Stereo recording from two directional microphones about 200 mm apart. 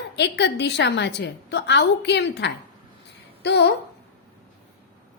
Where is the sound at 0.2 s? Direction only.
60° left (ahead or behind).